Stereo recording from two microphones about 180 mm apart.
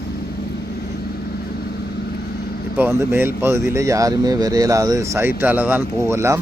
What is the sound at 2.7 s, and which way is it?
Speech, 10° right (ahead or behind).